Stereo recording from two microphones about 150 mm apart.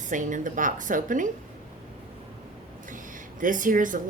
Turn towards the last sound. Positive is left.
turn(degrees=-60)  # may be behind; listen again after turning